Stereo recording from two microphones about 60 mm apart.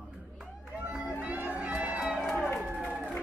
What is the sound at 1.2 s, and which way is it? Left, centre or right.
Music, right.